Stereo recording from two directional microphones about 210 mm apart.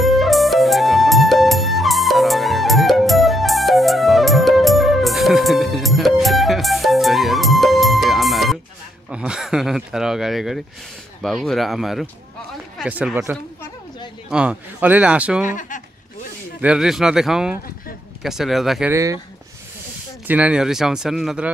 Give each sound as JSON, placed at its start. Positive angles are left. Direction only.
{"t": 0.0, "sound": "music", "side_deg": 0}
{"t": 9.1, "sound": "a sound", "side_deg": -5}
{"t": 11.2, "sound": "speech", "side_deg": 0}
{"t": 15.4, "sound": "speech", "side_deg": 35}
{"t": 16.6, "sound": "speech", "side_deg": -5}
{"t": 20.2, "sound": "speech", "side_deg": -5}